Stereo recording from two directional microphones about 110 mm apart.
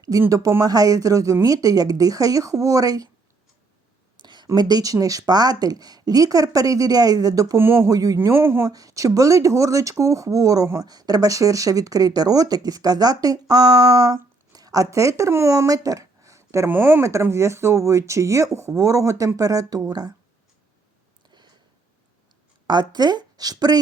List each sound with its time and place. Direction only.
0.0 s speech: 30° right (ahead or behind)
4.2 s a sound: 45° right (ahead or behind)
4.4 s speech: 35° right (ahead or behind); by 8.7 s 20° right (ahead or behind)
8.7 s speech: 30° right (ahead or behind)
22.6 s a woman's voice: 40° right (ahead or behind)